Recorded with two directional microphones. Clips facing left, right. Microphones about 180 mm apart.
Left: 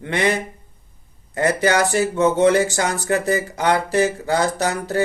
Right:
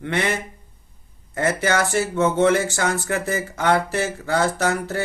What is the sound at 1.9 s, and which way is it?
Speech, 15° left (ahead or behind).